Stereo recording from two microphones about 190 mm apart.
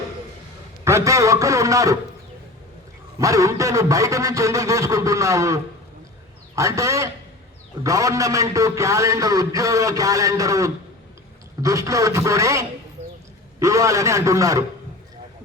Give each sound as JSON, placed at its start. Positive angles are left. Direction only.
{"t": 0.9, "sound": "a man's voice", "side_deg": -15}
{"t": 3.2, "sound": "a man's voice", "side_deg": -15}
{"t": 6.6, "sound": "a man's voice", "side_deg": -15}